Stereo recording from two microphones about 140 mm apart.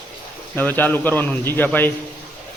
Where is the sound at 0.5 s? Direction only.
15° left (ahead or behind).